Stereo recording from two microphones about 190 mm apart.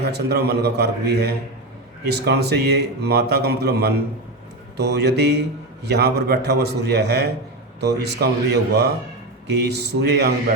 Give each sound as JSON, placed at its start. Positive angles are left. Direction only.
{"t": 0.1, "sound": "a man's voice", "side_deg": -60}